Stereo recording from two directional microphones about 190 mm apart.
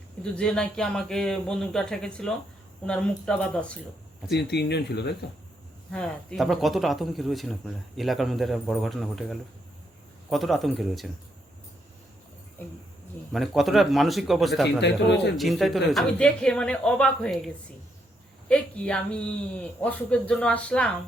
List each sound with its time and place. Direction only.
0.2 s speech: 5° left (ahead or behind)
4.3 s speech: 60° left (ahead or behind)
5.9 s speech: 5° left (ahead or behind)
12.6 s speech: 10° left (ahead or behind)
13.3 s speech: centre (ahead or behind)
14.8 s speech: 65° left (ahead or behind)
15.4 s speech: centre (ahead or behind)